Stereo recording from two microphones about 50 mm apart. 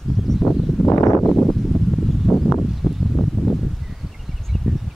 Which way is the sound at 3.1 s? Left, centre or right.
Centre.